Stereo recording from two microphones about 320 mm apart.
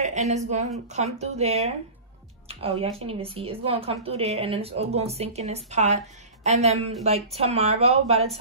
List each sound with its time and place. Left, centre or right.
0.0 s a woman's voice: right
2.8 s a woman's voice: centre